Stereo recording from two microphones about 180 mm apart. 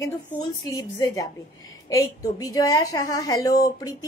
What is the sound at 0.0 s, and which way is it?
A woman's voice, 20° left (ahead or behind).